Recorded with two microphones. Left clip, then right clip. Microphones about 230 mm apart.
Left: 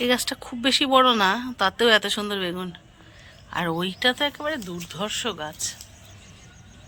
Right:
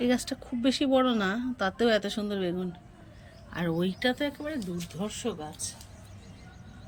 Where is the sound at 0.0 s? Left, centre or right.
Centre.